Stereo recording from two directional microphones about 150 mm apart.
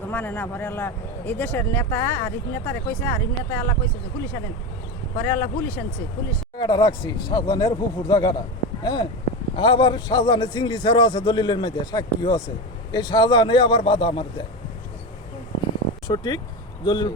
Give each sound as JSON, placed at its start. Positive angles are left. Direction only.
{"t": 0.1, "sound": "speech", "side_deg": 10}
{"t": 5.1, "sound": "speech", "side_deg": 15}
{"t": 6.6, "sound": "a man's voice", "side_deg": 30}
{"t": 16.0, "sound": "a man's voice", "side_deg": 30}